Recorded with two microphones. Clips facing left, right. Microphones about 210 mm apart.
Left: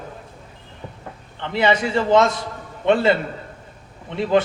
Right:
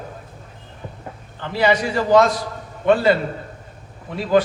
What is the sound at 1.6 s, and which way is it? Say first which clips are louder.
A man's voice: even; 25° left (ahead or behind).